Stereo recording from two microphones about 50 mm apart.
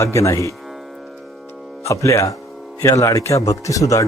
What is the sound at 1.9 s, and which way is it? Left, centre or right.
Speech, left.